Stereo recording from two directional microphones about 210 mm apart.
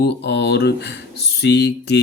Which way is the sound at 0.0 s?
50° left (ahead or behind).